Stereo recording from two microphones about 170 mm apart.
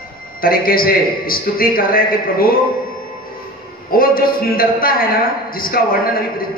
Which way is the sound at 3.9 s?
60° left (ahead or behind).